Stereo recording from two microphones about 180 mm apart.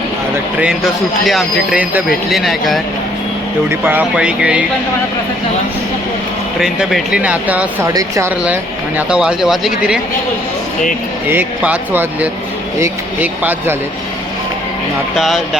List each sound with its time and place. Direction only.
1.3 s speech: 5° right (ahead or behind)
3.7 s speech: 10° right (ahead or behind)
6.6 s speech: 5° right (ahead or behind)
9.0 s speech: 5° right (ahead or behind)
11.3 s speech: 10° right (ahead or behind)
15.1 s speech: centre (ahead or behind)